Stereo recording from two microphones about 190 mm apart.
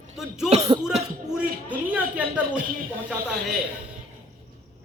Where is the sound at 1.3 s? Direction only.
10° right (ahead or behind).